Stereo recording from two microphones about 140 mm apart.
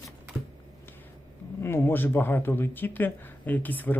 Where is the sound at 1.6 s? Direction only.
15° left (ahead or behind).